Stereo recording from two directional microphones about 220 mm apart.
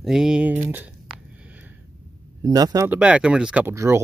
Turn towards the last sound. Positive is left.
turn(degrees=-10)  # may be behind; listen again after turning